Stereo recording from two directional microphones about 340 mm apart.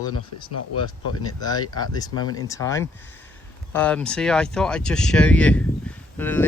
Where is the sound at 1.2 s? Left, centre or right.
Centre.